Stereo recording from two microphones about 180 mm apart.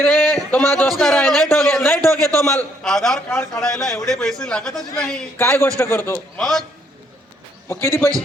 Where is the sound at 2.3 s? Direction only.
5° left (ahead or behind).